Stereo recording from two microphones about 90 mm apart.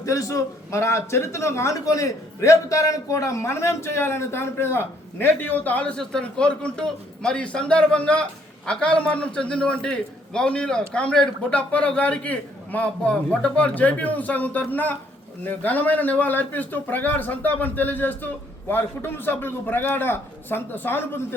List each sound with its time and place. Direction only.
0.0 s a man's voice: 35° left (ahead or behind)